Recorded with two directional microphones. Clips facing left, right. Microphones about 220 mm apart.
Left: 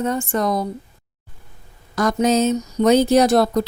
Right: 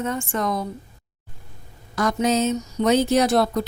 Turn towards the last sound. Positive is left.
turn(degrees=40)  # may be behind; listen again after turning